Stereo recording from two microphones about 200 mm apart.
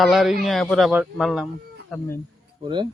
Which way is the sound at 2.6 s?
25° right (ahead or behind).